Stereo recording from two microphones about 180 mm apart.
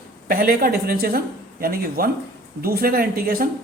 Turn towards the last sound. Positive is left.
turn(degrees=-55)  # may be behind; listen again after turning